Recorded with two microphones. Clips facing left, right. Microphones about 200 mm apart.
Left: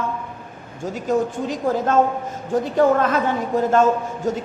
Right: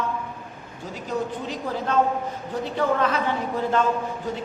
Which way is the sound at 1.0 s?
45° left (ahead or behind).